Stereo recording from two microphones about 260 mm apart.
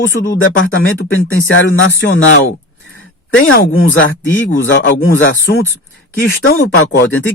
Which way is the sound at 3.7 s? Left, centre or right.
Left.